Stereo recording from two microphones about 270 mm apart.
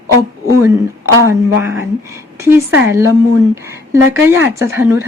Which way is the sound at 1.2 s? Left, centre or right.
Centre.